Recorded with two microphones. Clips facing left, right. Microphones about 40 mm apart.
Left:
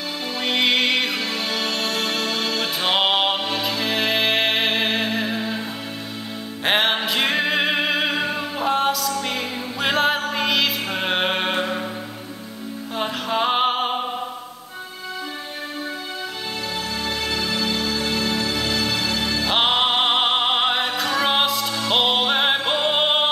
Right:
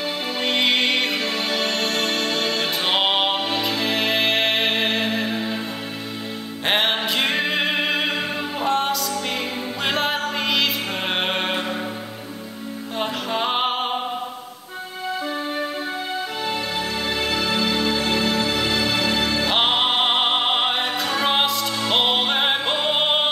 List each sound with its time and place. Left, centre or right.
0.5 s music: centre
6.6 s music: centre
13.0 s music: centre
17.3 s music: centre
19.5 s music: centre